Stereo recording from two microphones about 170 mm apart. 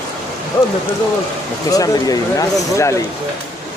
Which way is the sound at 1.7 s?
20° left (ahead or behind).